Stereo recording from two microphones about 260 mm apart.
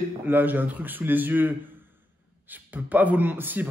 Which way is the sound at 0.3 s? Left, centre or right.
Centre.